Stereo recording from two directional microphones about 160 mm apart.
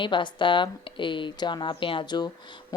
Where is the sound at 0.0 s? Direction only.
30° left (ahead or behind).